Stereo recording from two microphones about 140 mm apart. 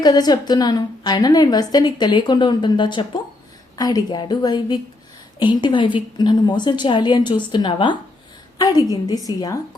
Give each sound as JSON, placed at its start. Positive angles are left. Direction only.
{"t": 0.0, "sound": "a woman's voice", "side_deg": 30}